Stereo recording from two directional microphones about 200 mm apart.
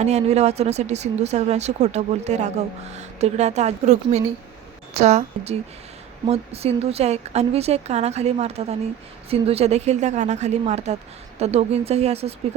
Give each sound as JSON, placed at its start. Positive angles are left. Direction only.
{"t": 0.0, "sound": "speech", "side_deg": -35}